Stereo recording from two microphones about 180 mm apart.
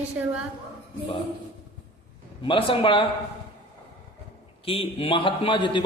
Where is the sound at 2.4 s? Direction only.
30° left (ahead or behind).